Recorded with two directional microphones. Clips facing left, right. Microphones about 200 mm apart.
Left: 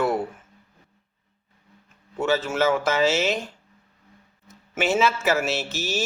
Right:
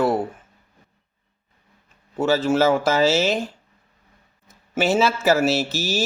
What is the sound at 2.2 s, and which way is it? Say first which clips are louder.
Speech: right 4 dB; 35° right (ahead or behind).